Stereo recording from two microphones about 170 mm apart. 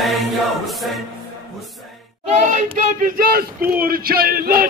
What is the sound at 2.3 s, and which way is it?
Child singing, 45° right (ahead or behind).